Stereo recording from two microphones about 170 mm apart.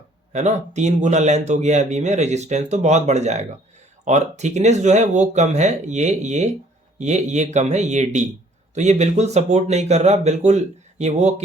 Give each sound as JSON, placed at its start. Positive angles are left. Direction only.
{"t": 0.3, "sound": "speech", "side_deg": -40}